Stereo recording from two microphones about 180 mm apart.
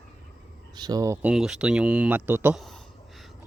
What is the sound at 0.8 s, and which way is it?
Speech, 20° right (ahead or behind).